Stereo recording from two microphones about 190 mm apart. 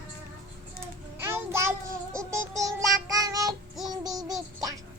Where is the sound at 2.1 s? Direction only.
15° right (ahead or behind).